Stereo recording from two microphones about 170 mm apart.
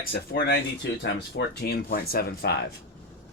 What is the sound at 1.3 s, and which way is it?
Speech, 70° left (ahead or behind).